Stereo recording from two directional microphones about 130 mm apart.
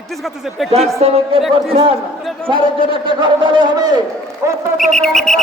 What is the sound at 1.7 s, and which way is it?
A man's voice, 40° right (ahead or behind).